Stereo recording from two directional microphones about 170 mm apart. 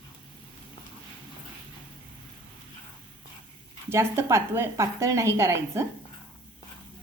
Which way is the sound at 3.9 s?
15° right (ahead or behind).